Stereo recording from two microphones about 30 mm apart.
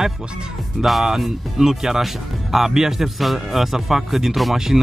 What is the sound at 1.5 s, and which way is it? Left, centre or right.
Speech, centre.